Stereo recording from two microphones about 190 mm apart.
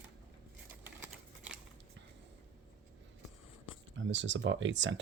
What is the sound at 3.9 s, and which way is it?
Speech, 80° right.